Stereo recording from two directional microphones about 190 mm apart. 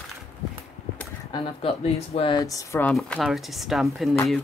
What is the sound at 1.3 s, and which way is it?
Speech, 30° left (ahead or behind).